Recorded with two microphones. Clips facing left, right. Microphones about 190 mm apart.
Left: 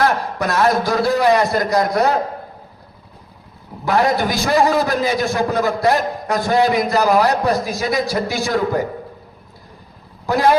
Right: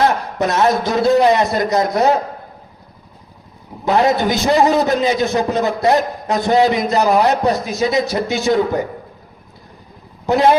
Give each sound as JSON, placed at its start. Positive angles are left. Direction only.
{"t": 0.0, "sound": "a man's voice", "side_deg": -20}
{"t": 3.8, "sound": "a man's voice", "side_deg": -20}
{"t": 10.2, "sound": "a man's voice", "side_deg": -20}